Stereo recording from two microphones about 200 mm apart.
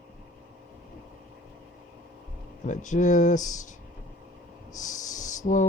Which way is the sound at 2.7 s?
40° left (ahead or behind).